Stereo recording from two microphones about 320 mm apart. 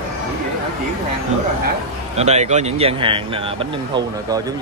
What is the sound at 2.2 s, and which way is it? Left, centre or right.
Speech, right.